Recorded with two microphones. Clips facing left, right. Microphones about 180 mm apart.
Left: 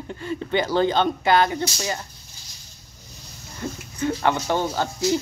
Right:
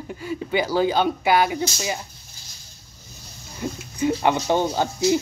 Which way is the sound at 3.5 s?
15° right (ahead or behind).